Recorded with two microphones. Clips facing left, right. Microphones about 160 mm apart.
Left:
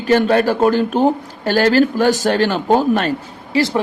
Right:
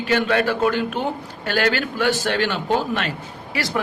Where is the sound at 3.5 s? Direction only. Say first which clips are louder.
Left 8 dB; 30° left (ahead or behind).